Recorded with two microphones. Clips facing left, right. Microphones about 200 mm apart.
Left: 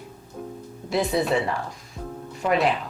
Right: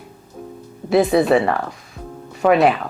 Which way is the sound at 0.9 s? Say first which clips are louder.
Right 9 dB; 60° right (ahead or behind).